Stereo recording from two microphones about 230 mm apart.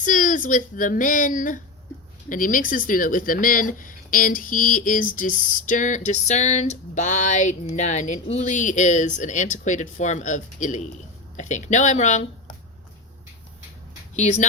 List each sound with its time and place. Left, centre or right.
0.0 s speech: left
14.2 s speech: left